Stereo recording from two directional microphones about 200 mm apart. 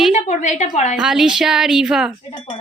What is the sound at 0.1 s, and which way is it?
Speech, 35° left (ahead or behind).